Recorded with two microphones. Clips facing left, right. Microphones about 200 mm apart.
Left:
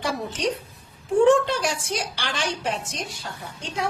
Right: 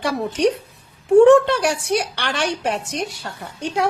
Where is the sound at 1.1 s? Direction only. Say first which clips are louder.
Right 7 dB; 65° right (ahead or behind).